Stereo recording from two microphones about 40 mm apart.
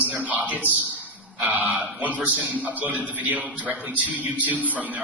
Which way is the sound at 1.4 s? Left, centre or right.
Right.